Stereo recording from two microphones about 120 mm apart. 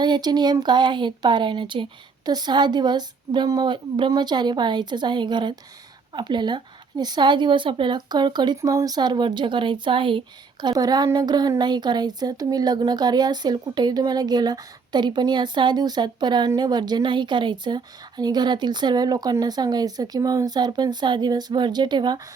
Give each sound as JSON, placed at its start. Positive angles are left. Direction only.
{"t": 0.0, "sound": "a woman's voice", "side_deg": -40}